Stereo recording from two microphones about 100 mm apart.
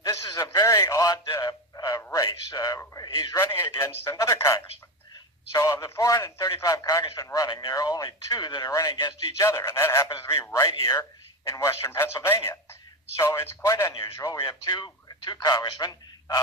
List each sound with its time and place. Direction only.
0.0 s radio: 30° left (ahead or behind)
1.3 s a sound: 35° left (ahead or behind)
4.0 s a man's voice: 30° left (ahead or behind)
8.7 s a man's voice: 35° left (ahead or behind)
14.7 s speech: 50° left (ahead or behind)